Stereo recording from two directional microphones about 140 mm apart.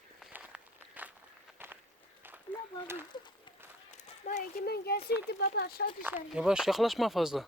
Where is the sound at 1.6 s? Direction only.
15° right (ahead or behind).